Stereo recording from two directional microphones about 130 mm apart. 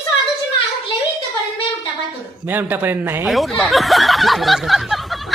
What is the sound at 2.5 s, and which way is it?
Speech, 15° right (ahead or behind).